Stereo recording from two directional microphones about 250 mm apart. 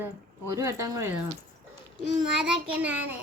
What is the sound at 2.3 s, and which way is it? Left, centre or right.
Child singing, centre.